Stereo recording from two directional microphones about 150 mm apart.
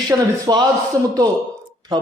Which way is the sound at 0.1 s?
25° right (ahead or behind).